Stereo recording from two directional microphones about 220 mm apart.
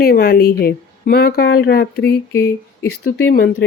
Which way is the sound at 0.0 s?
45° left (ahead or behind).